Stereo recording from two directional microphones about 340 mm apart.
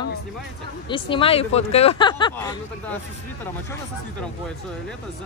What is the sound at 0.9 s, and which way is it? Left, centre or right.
Speech, centre.